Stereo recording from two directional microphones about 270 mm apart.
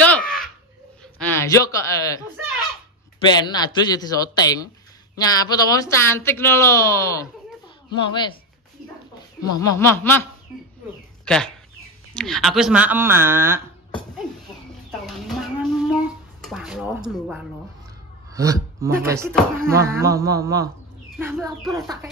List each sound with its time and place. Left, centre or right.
0.0 s a sound: centre
1.2 s speech: centre
3.3 s speech: centre
9.4 s speech: centre
12.1 s speech: centre
14.9 s chicken: centre
16.3 s speech: centre
19.6 s a sound: centre
21.2 s speech: centre